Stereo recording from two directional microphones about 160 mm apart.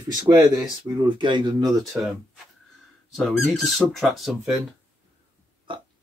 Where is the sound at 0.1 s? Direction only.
25° right (ahead or behind).